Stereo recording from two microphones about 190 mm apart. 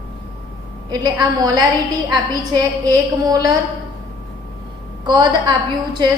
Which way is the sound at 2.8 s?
20° right (ahead or behind).